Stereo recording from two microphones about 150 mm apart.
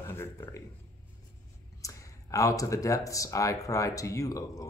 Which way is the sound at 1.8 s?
20° left (ahead or behind).